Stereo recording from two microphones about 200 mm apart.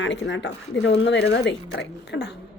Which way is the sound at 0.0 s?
65° left (ahead or behind).